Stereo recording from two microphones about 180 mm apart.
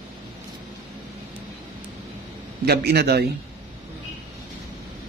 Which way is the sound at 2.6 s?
65° right (ahead or behind).